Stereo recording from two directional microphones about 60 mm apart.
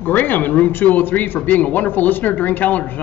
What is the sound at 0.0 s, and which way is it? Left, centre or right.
A man's voice, left.